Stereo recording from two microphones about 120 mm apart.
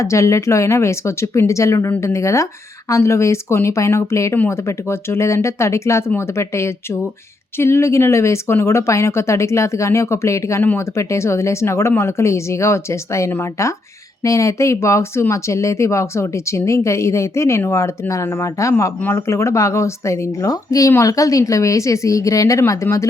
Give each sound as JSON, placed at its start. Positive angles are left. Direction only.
{"t": 0.0, "sound": "speech", "side_deg": 25}